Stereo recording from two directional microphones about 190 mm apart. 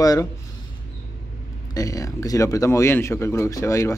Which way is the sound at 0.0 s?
20° left (ahead or behind).